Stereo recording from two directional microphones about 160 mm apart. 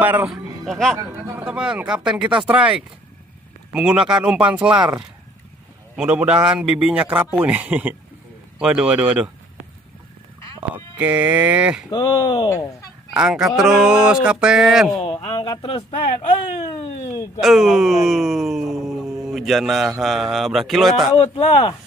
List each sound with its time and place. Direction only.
0.0 s a man's voice: 10° right (ahead or behind)
0.7 s a man's voice: 5° left (ahead or behind)
5.9 s a man's voice: 5° right (ahead or behind)
10.7 s a man's voice: 10° right (ahead or behind)
11.9 s speech: 25° left (ahead or behind)
13.1 s speech: 5° right (ahead or behind)
15.0 s speech: 35° left (ahead or behind)
17.0 s speech: 20° left (ahead or behind)
17.4 s speech: centre (ahead or behind)
21.2 s speech: 40° left (ahead or behind)